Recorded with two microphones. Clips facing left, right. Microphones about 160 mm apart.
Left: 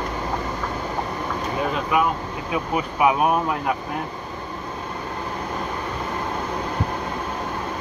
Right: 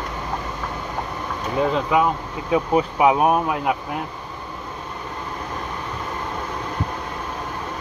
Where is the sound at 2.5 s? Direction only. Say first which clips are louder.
Right 6 dB; 25° right (ahead or behind).